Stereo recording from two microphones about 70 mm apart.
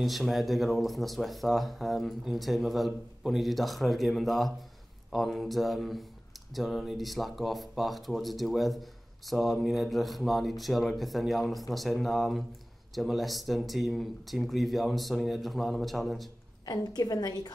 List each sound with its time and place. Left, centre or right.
0.0 s speech: centre
16.6 s a woman's voice: left